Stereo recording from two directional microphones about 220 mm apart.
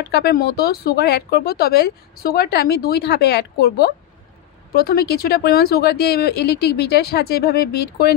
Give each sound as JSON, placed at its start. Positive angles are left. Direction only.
{"t": 0.1, "sound": "speech", "side_deg": 45}